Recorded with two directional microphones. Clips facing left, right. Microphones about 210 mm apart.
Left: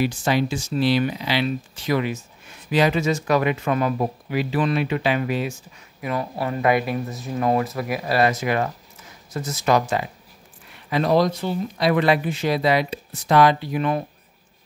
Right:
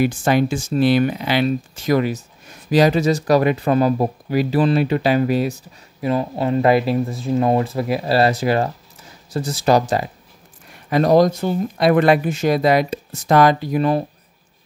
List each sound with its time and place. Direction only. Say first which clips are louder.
0.0 s speech: right 4 dB; 50° right (ahead or behind)